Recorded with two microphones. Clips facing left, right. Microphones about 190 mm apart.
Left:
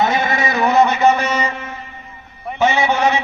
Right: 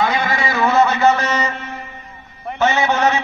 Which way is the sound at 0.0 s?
20° left (ahead or behind).